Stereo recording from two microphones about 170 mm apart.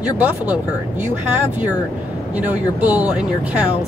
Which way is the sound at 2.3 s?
10° right (ahead or behind).